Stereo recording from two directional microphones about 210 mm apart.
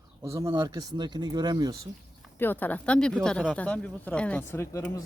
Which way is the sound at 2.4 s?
10° left (ahead or behind).